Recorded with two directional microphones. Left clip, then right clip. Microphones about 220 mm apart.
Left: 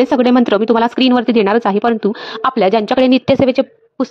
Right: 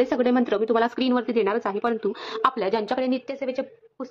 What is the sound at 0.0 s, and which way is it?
Speech, 35° left (ahead or behind).